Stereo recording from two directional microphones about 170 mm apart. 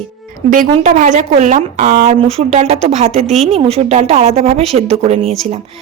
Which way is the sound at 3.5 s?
35° right (ahead or behind).